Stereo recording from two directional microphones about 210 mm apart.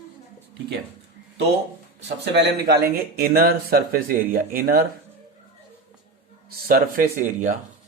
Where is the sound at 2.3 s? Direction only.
50° right (ahead or behind).